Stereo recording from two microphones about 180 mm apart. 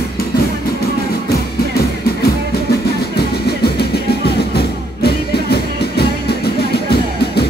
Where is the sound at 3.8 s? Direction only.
60° left (ahead or behind).